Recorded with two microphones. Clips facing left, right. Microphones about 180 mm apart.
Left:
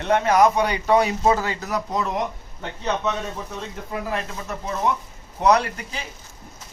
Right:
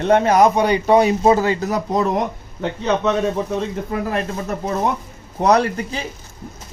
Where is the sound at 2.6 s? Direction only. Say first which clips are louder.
Right 7 dB; 80° right.